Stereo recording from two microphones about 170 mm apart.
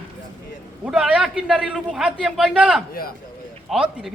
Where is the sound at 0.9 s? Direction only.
5° right (ahead or behind).